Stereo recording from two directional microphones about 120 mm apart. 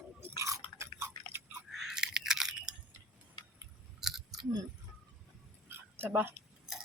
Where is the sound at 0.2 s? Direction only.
20° right (ahead or behind).